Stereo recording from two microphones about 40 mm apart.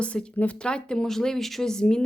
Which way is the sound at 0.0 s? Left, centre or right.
Left.